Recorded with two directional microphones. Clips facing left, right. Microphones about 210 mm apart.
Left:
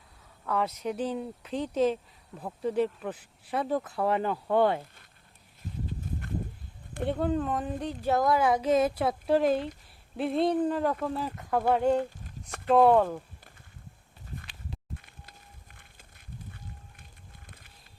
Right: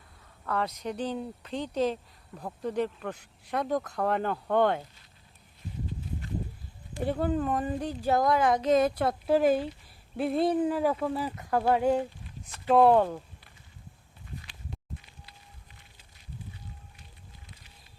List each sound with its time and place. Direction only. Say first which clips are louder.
0.4 s speech: left 2 dB; 5° left (ahead or behind)
7.0 s speech: even; centre (ahead or behind)
14.9 s a sound: left 1 dB; 55° left (ahead or behind)